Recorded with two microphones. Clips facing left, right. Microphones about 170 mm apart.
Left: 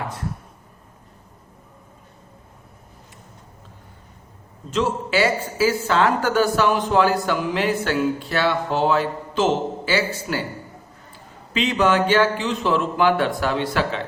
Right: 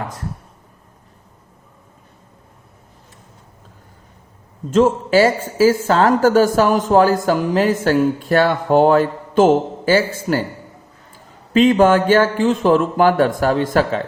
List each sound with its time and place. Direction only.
4.7 s speech: 45° right (ahead or behind)
11.5 s speech: 45° right (ahead or behind)